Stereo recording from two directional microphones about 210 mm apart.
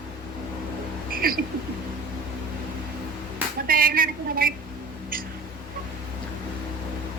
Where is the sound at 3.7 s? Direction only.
45° right (ahead or behind).